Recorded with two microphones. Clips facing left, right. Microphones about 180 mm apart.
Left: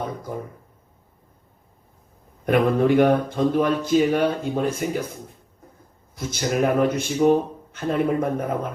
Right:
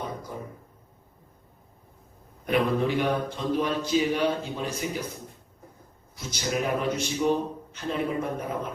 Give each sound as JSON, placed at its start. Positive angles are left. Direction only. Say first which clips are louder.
{"t": 0.0, "sound": "a sound", "louder": "left 5 dB", "side_deg": 50}
{"t": 2.5, "sound": "speech", "louder": "left 6 dB", "side_deg": 55}
{"t": 6.1, "sound": "speech", "louder": "left 6 dB", "side_deg": 50}